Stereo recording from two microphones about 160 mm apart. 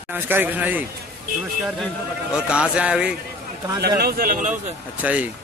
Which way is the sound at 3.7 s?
75° right (ahead or behind).